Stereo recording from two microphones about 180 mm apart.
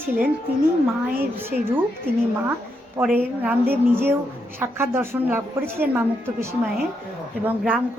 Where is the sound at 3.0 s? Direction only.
5° right (ahead or behind).